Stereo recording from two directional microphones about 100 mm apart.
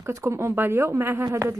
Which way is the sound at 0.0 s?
30° right (ahead or behind).